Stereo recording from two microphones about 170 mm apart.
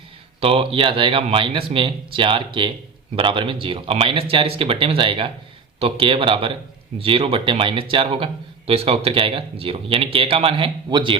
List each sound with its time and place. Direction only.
0.3 s speech: 35° right (ahead or behind)